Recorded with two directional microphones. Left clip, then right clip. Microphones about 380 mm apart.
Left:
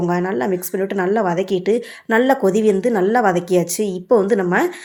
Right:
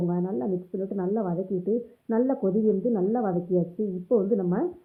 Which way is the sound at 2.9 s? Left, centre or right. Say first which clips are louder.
Left 11 dB; centre.